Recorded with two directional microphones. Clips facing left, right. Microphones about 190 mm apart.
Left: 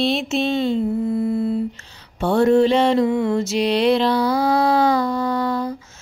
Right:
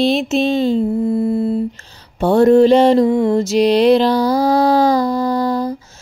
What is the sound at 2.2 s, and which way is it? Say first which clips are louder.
Mantra: right 5 dB; 40° right (ahead or behind).